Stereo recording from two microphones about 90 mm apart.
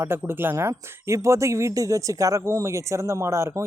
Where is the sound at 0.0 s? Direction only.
25° right (ahead or behind).